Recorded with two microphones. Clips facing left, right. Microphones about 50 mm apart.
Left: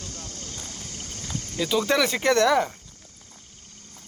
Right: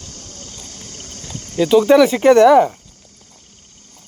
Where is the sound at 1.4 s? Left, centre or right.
Right.